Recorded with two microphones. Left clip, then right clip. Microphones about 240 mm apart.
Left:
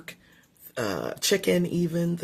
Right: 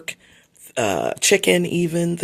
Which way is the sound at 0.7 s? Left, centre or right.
Right.